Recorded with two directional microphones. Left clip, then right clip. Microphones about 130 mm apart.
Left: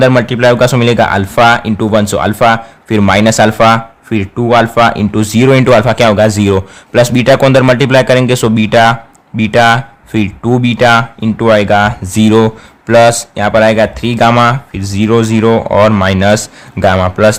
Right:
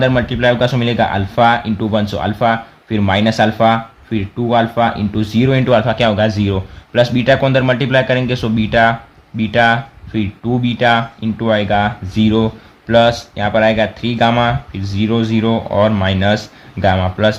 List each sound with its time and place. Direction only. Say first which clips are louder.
0.0 s speech: left 6 dB; 90° left
12.9 s speech: left 5 dB; 70° left (ahead or behind)